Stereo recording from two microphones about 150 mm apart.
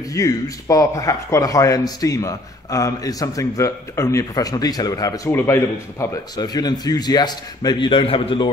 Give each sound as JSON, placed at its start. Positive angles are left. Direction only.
{"t": 0.1, "sound": "speech", "side_deg": 20}